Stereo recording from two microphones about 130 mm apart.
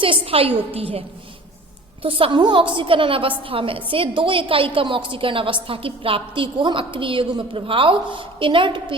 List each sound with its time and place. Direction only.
0.0 s a woman's voice: 45° right (ahead or behind)